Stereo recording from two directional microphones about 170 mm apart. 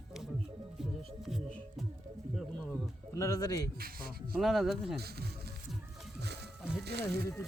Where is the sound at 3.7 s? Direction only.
60° right (ahead or behind).